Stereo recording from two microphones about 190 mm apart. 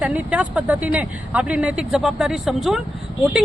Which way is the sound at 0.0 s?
5° right (ahead or behind).